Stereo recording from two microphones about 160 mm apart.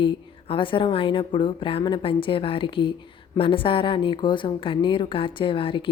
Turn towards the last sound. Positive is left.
turn(degrees=30)  # may be behind; listen again after turning